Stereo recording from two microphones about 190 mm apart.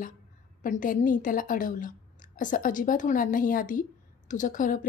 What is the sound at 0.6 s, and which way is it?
A woman's voice, 45° left (ahead or behind).